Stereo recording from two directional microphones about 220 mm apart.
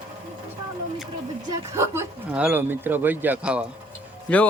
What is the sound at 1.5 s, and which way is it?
Speech, 10° right (ahead or behind).